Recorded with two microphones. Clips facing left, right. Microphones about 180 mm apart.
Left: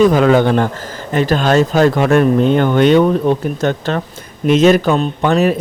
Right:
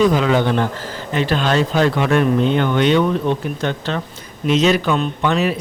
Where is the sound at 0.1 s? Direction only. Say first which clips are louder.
Left 5 dB; 50° left (ahead or behind).